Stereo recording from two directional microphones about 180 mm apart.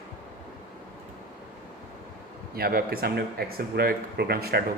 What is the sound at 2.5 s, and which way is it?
A man's voice, 55° right (ahead or behind).